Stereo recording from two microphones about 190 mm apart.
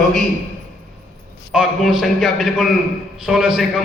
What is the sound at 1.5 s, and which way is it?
A man's voice, centre (ahead or behind).